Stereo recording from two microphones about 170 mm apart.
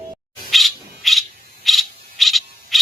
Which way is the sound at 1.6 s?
Centre (ahead or behind).